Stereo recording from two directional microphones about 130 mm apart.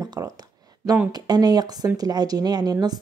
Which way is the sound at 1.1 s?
30° right (ahead or behind).